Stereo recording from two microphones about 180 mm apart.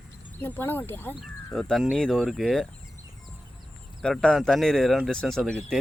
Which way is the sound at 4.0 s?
5° left (ahead or behind).